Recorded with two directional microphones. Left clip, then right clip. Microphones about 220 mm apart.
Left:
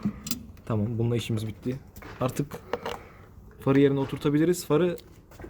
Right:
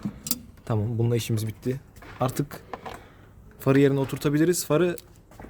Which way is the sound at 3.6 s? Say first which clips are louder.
Right 1 dB; 55° right (ahead or behind).